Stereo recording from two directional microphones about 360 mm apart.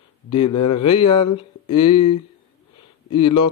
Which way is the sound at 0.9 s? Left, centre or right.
Centre.